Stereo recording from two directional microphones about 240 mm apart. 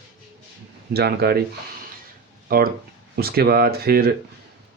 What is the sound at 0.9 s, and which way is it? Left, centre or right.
Speech, right.